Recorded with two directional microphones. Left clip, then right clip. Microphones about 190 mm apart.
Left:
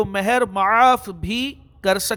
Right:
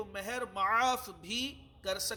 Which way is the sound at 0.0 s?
50° left (ahead or behind).